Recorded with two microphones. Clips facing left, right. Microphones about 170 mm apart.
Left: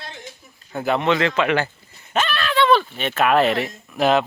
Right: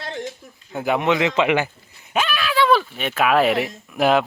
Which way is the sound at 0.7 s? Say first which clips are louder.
Even; 10° right (ahead or behind).